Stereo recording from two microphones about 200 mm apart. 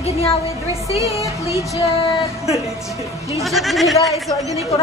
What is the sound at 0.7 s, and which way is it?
Speech, 15° right (ahead or behind).